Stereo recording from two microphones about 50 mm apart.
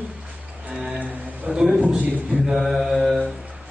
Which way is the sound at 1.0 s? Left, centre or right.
Right.